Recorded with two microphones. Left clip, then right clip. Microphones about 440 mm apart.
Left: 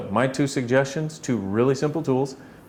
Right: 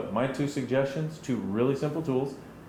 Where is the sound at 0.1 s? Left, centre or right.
Left.